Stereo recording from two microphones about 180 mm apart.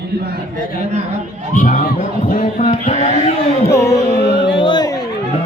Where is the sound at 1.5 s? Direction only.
45° left (ahead or behind).